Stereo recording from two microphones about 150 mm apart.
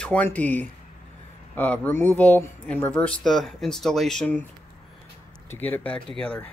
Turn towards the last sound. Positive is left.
turn(degrees=5)  # may be behind; listen again after turning